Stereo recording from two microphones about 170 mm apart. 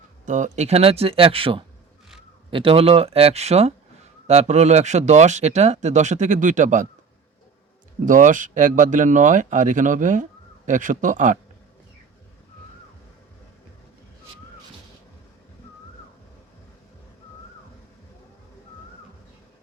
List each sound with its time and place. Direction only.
0.3 s speech: 45° right (ahead or behind)
8.0 s speech: 50° right (ahead or behind)